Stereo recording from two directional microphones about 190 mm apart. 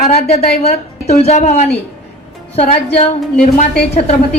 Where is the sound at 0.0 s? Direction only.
35° left (ahead or behind).